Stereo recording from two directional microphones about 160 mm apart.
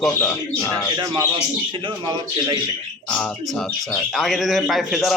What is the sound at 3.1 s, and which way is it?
Speech, 5° left (ahead or behind).